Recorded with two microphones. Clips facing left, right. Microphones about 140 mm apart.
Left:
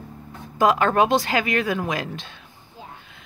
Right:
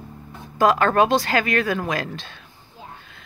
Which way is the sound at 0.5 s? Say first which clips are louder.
Right 1 dB; 15° left (ahead or behind).